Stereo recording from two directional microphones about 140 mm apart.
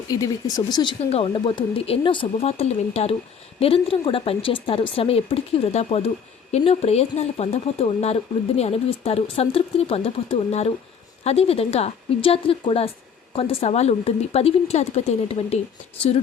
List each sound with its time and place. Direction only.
0.1 s a woman's voice: 25° left (ahead or behind); by 15.5 s 50° left (ahead or behind)